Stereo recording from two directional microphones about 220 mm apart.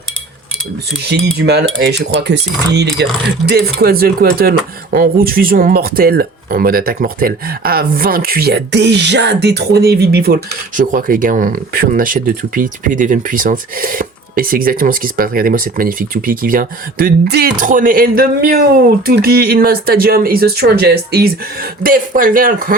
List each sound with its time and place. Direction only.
1.0 s speech: 50° right (ahead or behind)